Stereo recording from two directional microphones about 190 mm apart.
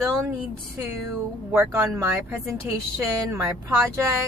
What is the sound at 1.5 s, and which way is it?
Speech, 10° right (ahead or behind).